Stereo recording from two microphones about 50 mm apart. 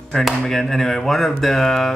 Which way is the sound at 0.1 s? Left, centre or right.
Centre.